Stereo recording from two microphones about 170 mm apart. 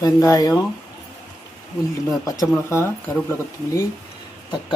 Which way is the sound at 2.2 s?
20° left (ahead or behind).